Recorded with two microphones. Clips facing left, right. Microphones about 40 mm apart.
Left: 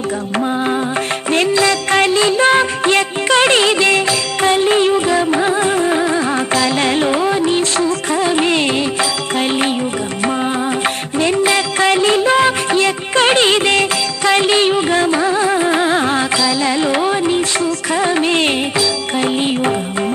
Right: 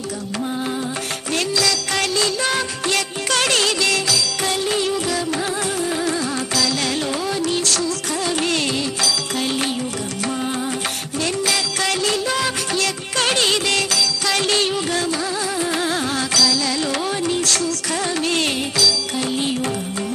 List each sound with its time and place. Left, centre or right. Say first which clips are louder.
1.3 s music: left 7 dB; left
11.1 s music: left 7 dB; left